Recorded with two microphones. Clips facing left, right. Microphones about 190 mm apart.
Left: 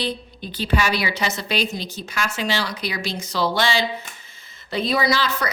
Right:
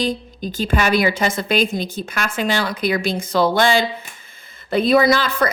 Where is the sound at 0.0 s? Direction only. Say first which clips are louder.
Right 5 dB; 45° right (ahead or behind).